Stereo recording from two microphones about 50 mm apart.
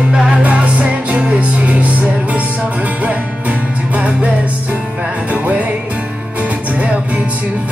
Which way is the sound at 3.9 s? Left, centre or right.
Right.